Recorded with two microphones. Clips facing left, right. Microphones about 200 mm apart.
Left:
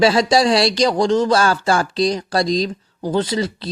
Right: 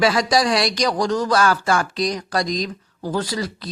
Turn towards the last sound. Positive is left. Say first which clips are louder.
# left 5 dB
turn(degrees=25)  # may be behind; listen again after turning